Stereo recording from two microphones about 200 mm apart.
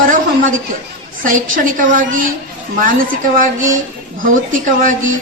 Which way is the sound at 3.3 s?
40° right (ahead or behind).